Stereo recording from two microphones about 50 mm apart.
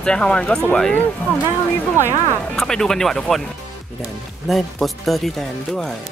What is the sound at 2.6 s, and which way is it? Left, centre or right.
Speech, centre.